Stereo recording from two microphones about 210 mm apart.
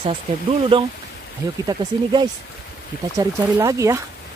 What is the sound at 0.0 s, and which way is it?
Speech, 25° right (ahead or behind).